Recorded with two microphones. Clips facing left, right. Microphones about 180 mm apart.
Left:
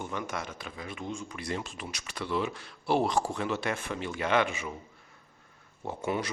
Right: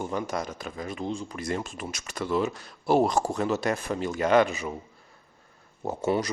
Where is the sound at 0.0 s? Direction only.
35° right (ahead or behind).